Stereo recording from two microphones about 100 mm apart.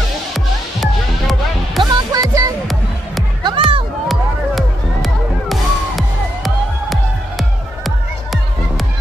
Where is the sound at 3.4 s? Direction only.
55° right (ahead or behind).